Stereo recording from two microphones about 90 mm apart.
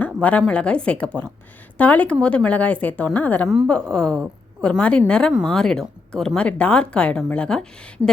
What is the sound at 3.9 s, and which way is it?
Speech, 10° left (ahead or behind).